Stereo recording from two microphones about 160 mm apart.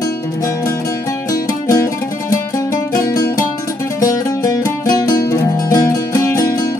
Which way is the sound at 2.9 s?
20° left (ahead or behind).